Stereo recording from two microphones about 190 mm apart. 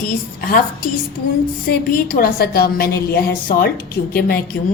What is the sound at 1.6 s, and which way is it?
A woman's voice, 50° left (ahead or behind).